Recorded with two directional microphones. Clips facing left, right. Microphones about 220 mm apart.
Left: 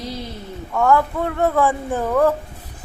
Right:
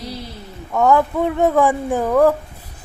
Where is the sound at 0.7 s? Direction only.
20° right (ahead or behind).